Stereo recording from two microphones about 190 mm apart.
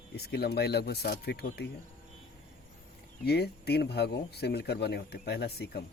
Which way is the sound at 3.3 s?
60° left (ahead or behind).